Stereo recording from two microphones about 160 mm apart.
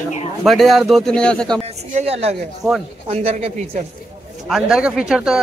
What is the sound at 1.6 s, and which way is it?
Speech, 40° right (ahead or behind).